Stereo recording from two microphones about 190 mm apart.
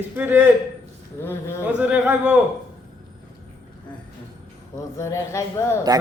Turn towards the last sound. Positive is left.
turn(degrees=15)  # may be behind; listen again after turning